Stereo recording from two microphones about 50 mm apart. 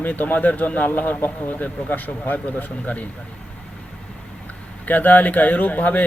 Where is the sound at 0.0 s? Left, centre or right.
Left.